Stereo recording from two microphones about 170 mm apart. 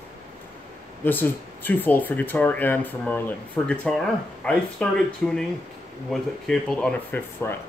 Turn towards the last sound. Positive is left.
turn(degrees=10)  # may be behind; listen again after turning